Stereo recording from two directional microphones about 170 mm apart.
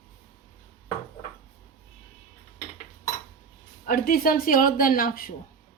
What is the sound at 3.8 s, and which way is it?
A woman's voice, 60° left (ahead or behind).